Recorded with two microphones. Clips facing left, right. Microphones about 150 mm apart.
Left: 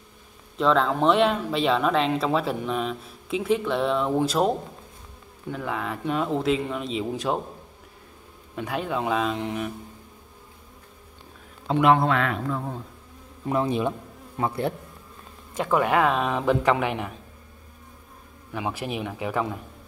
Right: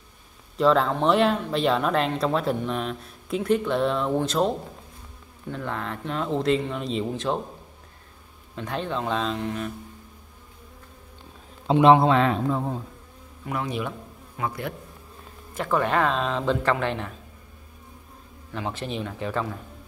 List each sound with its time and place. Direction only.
0.6 s speech: centre (ahead or behind)
5.5 s speech: 5° left (ahead or behind)
8.5 s speech: 10° left (ahead or behind)
11.6 s a man's voice: 25° right (ahead or behind)
13.5 s a man's voice: 25° left (ahead or behind)
15.5 s speech: 15° left (ahead or behind)
18.5 s speech: 10° left (ahead or behind)